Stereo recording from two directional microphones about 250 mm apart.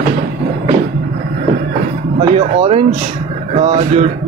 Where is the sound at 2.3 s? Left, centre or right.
Right.